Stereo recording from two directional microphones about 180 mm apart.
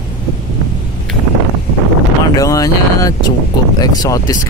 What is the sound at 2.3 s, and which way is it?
Speech, 20° left (ahead or behind).